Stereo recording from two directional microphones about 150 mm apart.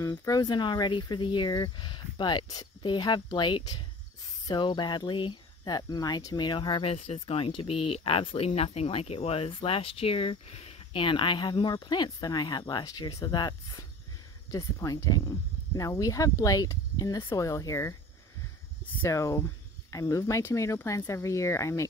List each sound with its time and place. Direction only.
0.0 s speech: 25° left (ahead or behind)
19.0 s speech: 20° left (ahead or behind)